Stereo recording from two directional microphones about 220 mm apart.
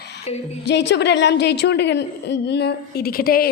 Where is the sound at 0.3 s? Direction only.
30° left (ahead or behind).